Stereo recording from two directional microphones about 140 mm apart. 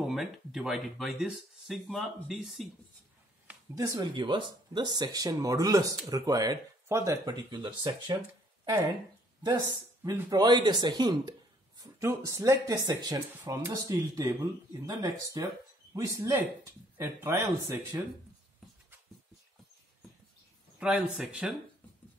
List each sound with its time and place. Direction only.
0.0 s speech: centre (ahead or behind)
3.7 s speech: 25° right (ahead or behind)
10.0 s speech: 25° right (ahead or behind)
20.8 s speech: 10° right (ahead or behind)